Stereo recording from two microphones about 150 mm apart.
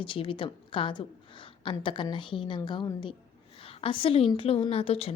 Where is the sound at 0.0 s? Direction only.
35° left (ahead or behind).